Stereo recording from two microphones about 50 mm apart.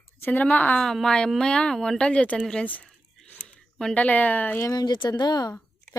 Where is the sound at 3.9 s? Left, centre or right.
Left.